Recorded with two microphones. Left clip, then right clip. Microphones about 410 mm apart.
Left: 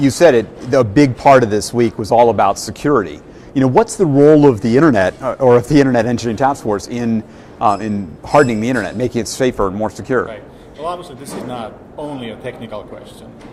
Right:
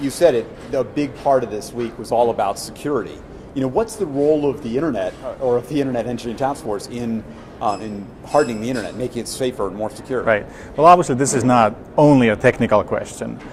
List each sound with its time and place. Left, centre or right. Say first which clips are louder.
0.0 s speech: left 6 dB; left
10.8 s a man's voice: right 14 dB; right